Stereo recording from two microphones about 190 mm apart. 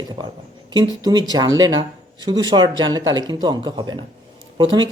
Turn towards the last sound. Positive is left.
turn(degrees=-25)  # may be behind; listen again after turning